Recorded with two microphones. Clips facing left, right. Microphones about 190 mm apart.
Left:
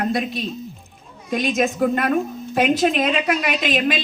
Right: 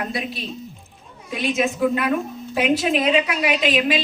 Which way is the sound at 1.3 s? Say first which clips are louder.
Left 2 dB; 45° left (ahead or behind).